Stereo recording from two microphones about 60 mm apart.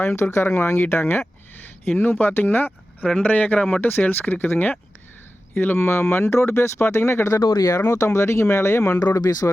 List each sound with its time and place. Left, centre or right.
0.0 s speech: left
3.0 s speech: centre
3.2 s speech: left
9.2 s speech: left